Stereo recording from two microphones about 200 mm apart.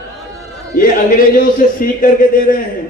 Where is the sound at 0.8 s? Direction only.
45° left (ahead or behind).